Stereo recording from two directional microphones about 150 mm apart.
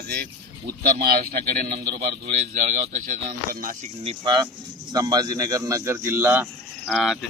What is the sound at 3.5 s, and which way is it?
Speech, 65° right (ahead or behind).